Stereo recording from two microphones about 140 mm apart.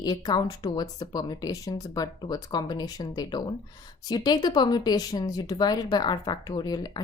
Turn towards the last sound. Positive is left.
turn(degrees=30)  # may be behind; listen again after turning